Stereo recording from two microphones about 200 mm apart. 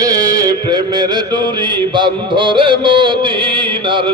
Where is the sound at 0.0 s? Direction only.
20° right (ahead or behind).